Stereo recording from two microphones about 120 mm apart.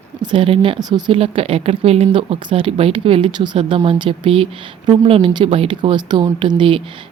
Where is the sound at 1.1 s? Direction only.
50° right (ahead or behind).